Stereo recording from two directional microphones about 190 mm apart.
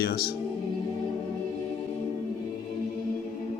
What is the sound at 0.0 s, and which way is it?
Speech, 55° left (ahead or behind).